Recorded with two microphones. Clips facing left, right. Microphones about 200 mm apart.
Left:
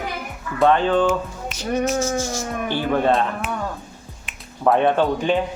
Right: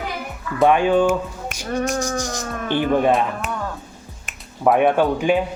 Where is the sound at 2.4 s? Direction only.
15° left (ahead or behind).